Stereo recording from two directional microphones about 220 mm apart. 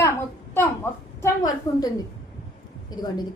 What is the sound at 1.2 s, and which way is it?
Speech, 15° left (ahead or behind).